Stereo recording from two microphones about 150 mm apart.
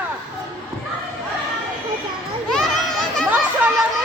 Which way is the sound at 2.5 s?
5° left (ahead or behind).